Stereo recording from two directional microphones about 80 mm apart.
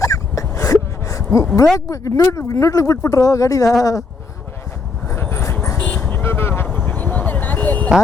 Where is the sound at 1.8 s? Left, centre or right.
Left.